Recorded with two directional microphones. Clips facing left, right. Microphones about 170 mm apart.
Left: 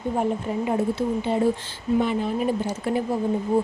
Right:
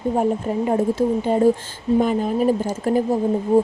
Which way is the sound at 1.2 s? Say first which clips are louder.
Right 5 dB; 45° right (ahead or behind).